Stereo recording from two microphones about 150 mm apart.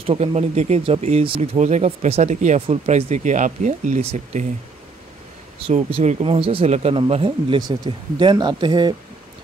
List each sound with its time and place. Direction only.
0.0 s speech: 40° right (ahead or behind)
5.7 s speech: 40° right (ahead or behind)